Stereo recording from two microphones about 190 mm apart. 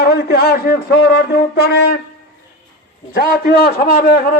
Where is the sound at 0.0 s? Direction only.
55° left (ahead or behind).